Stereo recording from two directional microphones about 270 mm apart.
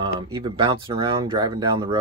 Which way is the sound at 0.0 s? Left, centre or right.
Centre.